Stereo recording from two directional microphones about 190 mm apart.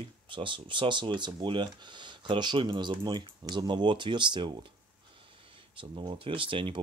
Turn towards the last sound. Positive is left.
turn(degrees=-25)  # may be behind; listen again after turning